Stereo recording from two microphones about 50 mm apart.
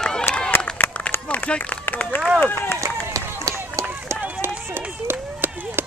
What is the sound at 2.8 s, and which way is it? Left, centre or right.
Run, right.